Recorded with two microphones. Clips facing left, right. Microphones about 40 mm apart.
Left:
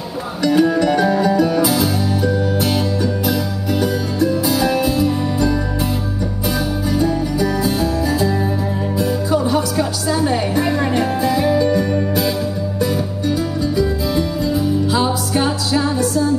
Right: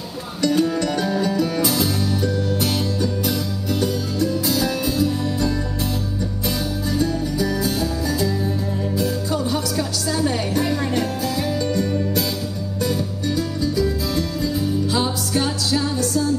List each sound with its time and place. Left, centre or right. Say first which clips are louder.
0.4 s music: left 5 dB; centre
6.9 s music: left 4 dB; centre